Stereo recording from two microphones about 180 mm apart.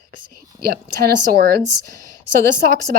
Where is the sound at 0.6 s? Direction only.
55° right (ahead or behind).